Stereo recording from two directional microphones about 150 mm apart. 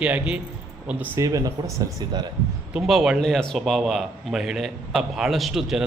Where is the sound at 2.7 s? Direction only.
5° right (ahead or behind).